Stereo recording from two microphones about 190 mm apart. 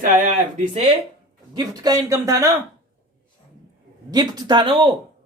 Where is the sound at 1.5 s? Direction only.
20° right (ahead or behind).